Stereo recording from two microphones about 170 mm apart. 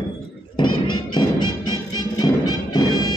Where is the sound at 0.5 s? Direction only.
25° left (ahead or behind).